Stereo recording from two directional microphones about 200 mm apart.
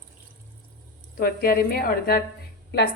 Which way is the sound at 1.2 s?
50° left (ahead or behind).